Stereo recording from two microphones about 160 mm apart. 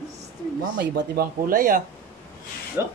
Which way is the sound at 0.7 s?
65° right (ahead or behind).